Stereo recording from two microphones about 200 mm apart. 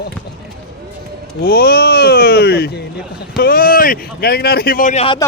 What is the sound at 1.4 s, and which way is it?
Speech, 50° left (ahead or behind).